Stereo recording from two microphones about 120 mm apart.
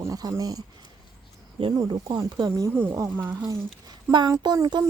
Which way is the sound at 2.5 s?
20° right (ahead or behind).